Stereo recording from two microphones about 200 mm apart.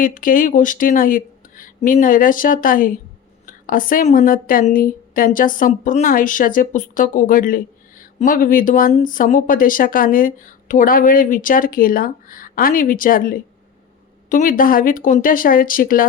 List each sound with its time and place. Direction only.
0.0 s a woman's voice: 45° left (ahead or behind)